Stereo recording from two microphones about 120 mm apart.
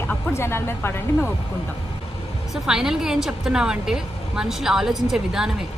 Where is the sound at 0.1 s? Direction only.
20° left (ahead or behind).